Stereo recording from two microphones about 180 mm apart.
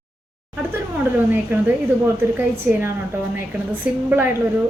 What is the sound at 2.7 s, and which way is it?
A woman's voice, 10° right (ahead or behind).